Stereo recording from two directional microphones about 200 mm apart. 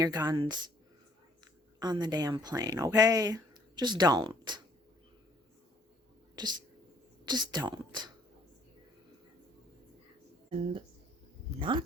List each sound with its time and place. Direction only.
0.0 s speech: 20° right (ahead or behind)
1.8 s speech: 20° right (ahead or behind)
6.3 s speech: 20° right (ahead or behind)
10.6 s speech: 25° right (ahead or behind)